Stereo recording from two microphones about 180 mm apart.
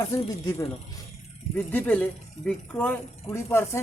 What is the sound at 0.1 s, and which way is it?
Speech, 15° left (ahead or behind).